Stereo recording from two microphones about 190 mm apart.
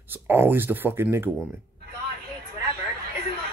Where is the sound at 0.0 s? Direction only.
10° right (ahead or behind).